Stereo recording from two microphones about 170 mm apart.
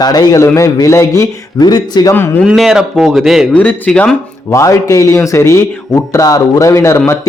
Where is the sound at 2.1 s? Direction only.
10° left (ahead or behind).